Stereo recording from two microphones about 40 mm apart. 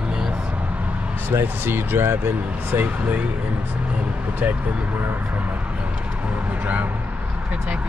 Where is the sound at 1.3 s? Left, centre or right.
Right.